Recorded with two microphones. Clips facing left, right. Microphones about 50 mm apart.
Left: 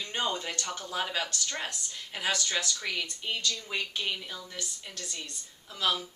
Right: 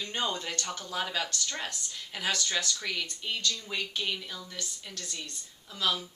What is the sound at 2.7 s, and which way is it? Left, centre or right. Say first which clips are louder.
Speech: even; centre.